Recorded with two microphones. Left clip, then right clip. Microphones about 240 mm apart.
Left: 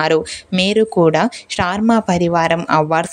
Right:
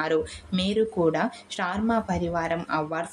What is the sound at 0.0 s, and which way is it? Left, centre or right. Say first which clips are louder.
Speech: left 10 dB; left.